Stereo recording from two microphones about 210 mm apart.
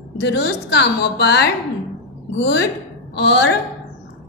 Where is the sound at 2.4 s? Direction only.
55° left (ahead or behind).